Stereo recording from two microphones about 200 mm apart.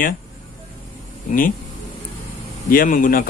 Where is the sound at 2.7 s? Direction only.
45° left (ahead or behind).